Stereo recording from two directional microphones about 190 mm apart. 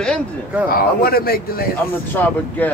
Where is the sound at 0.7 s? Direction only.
50° left (ahead or behind).